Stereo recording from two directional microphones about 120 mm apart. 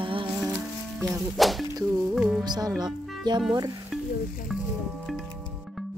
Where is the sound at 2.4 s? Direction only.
35° right (ahead or behind).